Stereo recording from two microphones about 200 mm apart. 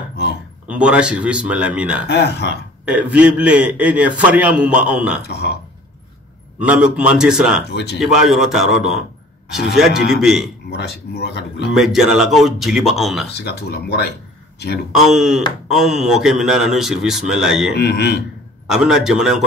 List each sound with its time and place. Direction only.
0.1 s a sound: 55° left (ahead or behind)
0.7 s a man's voice: 5° right (ahead or behind)
2.0 s speech: 55° left (ahead or behind)
2.8 s a man's voice: 5° right (ahead or behind)
5.2 s speech: 55° left (ahead or behind)
6.6 s a man's voice: 5° right (ahead or behind)
10.7 s speech: 55° left (ahead or behind)
11.7 s a man's voice: centre (ahead or behind)
13.4 s speech: 55° left (ahead or behind)
14.9 s a man's voice: 5° right (ahead or behind)
17.7 s speech: 55° left (ahead or behind)
18.7 s a man's voice: 5° right (ahead or behind)